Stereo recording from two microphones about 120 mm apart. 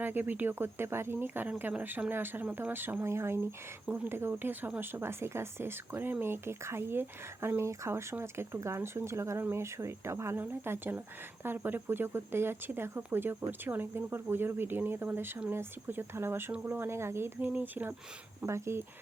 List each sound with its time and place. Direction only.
0.0 s speech: 15° right (ahead or behind)